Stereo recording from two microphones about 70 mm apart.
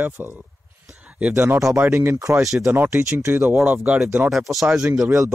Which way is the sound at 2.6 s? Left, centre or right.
Right.